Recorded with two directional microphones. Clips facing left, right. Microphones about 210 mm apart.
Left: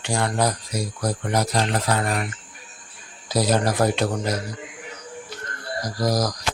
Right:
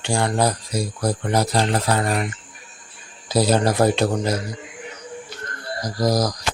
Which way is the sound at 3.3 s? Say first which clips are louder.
Right 3 dB; 30° right (ahead or behind).